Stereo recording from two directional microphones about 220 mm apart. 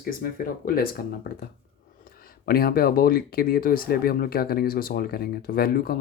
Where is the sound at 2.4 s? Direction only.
45° left (ahead or behind).